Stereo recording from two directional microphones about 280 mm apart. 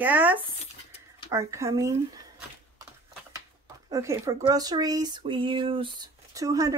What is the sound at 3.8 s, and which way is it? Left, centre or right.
Speech, centre.